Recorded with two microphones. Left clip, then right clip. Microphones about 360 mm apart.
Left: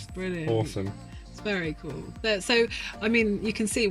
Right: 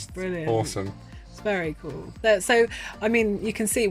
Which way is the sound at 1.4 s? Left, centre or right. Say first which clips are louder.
Right 4 dB; centre.